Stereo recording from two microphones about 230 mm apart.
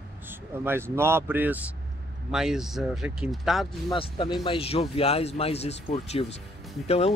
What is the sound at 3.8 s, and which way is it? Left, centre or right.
Speech, left.